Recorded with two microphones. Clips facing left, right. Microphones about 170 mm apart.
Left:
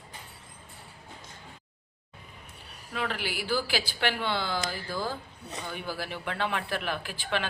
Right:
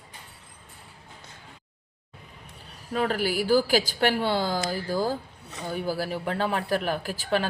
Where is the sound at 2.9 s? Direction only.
40° right (ahead or behind).